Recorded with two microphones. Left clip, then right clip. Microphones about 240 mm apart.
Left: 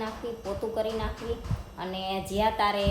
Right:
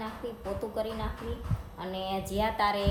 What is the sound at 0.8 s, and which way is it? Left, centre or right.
Speech, centre.